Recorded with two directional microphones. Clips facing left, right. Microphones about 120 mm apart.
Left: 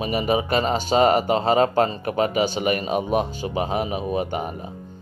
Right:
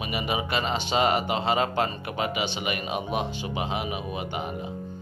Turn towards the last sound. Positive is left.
turn(degrees=40)  # may be behind; listen again after turning